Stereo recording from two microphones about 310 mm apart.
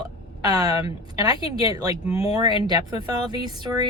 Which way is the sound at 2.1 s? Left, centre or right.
Centre.